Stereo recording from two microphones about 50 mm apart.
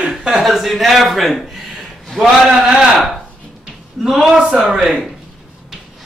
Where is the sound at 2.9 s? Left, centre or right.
Centre.